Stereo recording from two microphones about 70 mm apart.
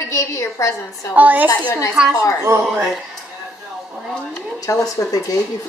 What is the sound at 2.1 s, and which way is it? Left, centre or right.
Speech, left.